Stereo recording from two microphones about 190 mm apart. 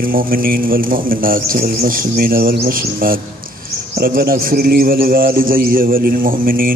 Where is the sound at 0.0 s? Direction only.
50° right (ahead or behind).